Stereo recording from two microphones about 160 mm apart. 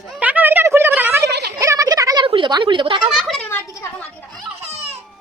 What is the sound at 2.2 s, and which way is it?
Speech, 30° right (ahead or behind).